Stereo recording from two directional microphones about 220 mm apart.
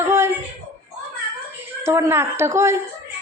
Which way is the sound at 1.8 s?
10° right (ahead or behind).